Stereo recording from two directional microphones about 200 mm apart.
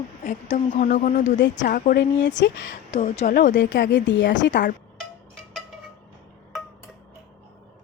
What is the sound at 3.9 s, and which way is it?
Speech, 65° left (ahead or behind).